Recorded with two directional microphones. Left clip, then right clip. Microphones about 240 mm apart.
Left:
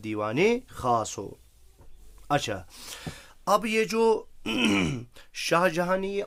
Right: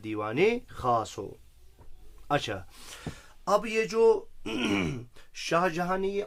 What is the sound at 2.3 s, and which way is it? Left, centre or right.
Speech, left.